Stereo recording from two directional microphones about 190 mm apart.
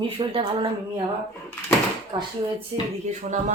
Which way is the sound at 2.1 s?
25° right (ahead or behind).